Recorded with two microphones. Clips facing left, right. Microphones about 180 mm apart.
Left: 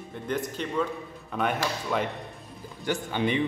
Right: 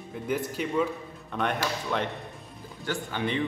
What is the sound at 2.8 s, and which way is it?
Speech, 20° left (ahead or behind).